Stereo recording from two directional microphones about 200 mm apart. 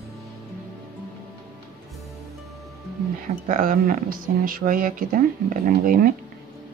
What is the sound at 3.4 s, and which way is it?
Speech, 45° right (ahead or behind).